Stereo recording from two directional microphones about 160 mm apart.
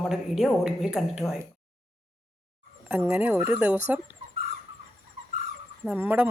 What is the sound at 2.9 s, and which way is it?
Speech, 10° right (ahead or behind).